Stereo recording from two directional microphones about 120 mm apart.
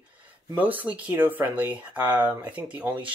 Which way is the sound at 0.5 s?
15° right (ahead or behind).